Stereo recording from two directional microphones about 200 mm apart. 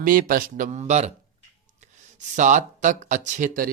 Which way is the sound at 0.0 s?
45° right (ahead or behind).